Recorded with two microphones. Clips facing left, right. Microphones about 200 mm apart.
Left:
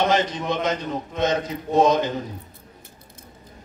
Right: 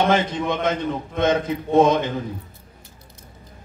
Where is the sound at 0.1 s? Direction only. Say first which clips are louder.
Right 2 dB; 55° right (ahead or behind).